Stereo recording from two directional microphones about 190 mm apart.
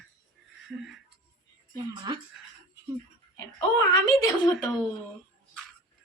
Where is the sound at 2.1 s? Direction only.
25° right (ahead or behind).